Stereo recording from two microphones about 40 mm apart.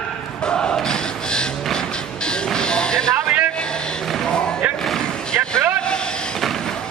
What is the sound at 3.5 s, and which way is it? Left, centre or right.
Vehicle, left.